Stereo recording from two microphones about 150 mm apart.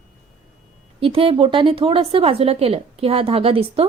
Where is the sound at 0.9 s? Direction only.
40° right (ahead or behind).